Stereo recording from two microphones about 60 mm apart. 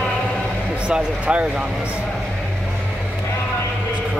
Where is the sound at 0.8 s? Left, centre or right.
Centre.